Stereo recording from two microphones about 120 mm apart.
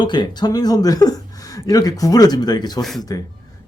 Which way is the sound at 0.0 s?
40° left (ahead or behind).